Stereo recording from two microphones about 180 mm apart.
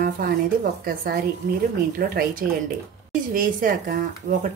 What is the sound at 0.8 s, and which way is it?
A woman's voice, 55° right (ahead or behind).